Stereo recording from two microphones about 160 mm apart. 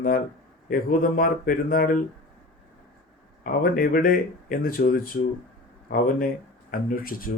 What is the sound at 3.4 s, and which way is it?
Speech, 60° left (ahead or behind).